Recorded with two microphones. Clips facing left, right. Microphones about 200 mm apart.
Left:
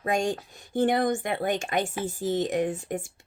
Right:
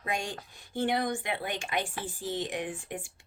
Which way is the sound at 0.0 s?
45° left (ahead or behind).